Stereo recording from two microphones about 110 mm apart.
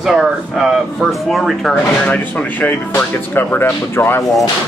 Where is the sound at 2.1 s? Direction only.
15° left (ahead or behind).